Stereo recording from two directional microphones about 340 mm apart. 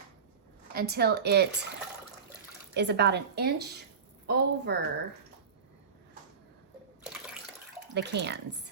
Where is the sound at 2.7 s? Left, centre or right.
Right.